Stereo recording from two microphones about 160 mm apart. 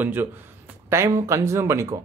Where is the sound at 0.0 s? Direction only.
10° right (ahead or behind).